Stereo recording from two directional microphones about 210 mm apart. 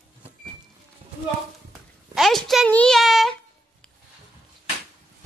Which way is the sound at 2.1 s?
Centre (ahead or behind).